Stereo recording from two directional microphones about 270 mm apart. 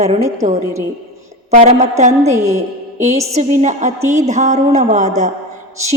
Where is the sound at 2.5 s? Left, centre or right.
Right.